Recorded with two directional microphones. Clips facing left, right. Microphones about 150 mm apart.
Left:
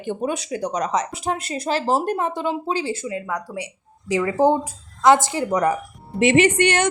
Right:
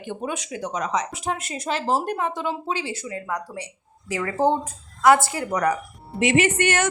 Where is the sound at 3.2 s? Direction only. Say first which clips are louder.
Left 2 dB; centre (ahead or behind).